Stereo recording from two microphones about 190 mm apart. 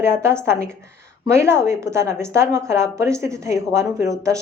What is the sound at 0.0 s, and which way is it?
Speech, 15° right (ahead or behind).